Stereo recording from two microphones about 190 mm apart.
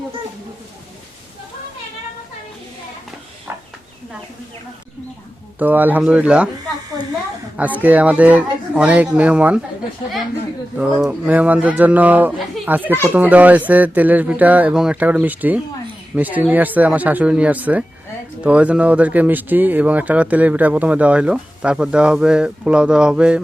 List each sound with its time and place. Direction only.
5.5 s speech: 10° right (ahead or behind)
7.8 s speech: 10° right (ahead or behind)
10.8 s speech: 5° right (ahead or behind)